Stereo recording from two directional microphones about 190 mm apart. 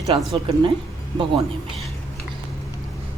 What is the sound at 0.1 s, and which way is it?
Speech, 25° right (ahead or behind).